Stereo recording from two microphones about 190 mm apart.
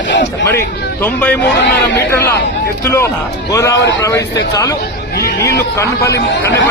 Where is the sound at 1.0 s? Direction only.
10° left (ahead or behind).